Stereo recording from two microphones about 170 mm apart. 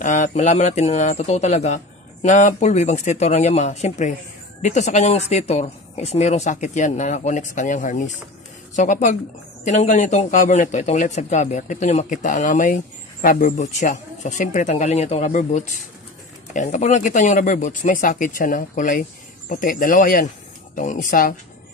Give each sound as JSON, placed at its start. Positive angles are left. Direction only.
{"t": 0.0, "sound": "speech", "side_deg": 50}